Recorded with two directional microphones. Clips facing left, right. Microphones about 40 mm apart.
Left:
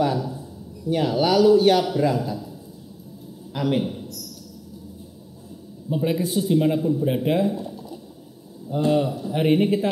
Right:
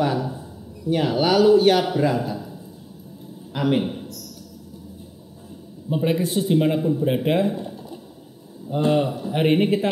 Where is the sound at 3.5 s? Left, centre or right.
Right.